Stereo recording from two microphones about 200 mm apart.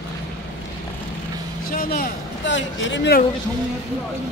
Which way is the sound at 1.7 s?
45° left (ahead or behind).